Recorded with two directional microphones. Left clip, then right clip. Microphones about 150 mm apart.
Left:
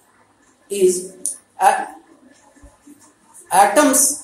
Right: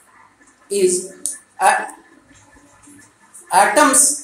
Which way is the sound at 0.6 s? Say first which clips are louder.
Left 1 dB; 5° left (ahead or behind).